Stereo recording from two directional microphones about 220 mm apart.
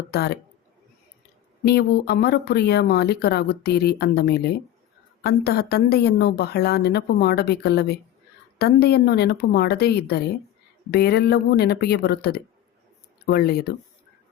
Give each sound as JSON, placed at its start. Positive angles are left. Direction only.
{"t": 0.1, "sound": "speech", "side_deg": 45}
{"t": 1.6, "sound": "speech", "side_deg": 45}